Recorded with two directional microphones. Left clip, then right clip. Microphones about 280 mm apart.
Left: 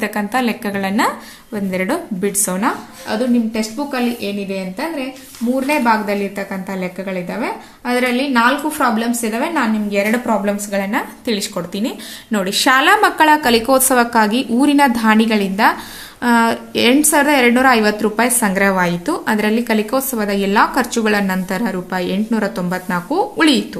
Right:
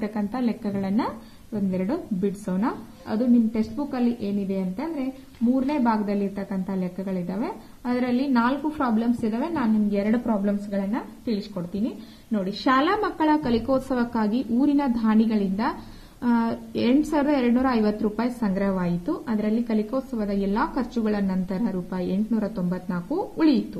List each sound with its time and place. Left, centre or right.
0.0 s a woman's voice: centre
5.7 s a woman's voice: centre
12.3 s a woman's voice: left